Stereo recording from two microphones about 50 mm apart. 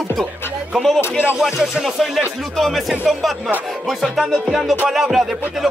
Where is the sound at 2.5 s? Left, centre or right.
Centre.